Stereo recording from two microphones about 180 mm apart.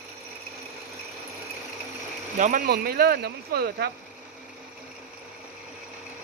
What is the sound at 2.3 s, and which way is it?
Speech, 45° right (ahead or behind).